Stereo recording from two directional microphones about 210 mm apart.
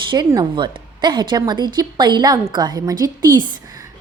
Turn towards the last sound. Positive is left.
turn(degrees=-20)  # may be behind; listen again after turning